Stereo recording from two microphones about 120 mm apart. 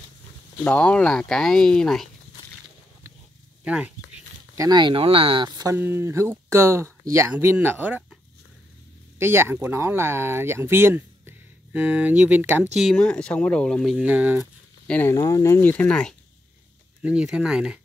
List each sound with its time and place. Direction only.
0.7 s speech: 10° left (ahead or behind)
3.6 s speech: 10° right (ahead or behind)
4.6 s speech: 35° right (ahead or behind)
5.8 s speech: 20° right (ahead or behind)
9.2 s speech: 20° right (ahead or behind)
12.9 s speech: 10° left (ahead or behind)
14.0 s speech: 10° right (ahead or behind)
14.9 s speech: 15° left (ahead or behind)
15.1 s speech: 25° left (ahead or behind)
15.7 s speech: 10° left (ahead or behind)
17.0 s speech: 10° right (ahead or behind)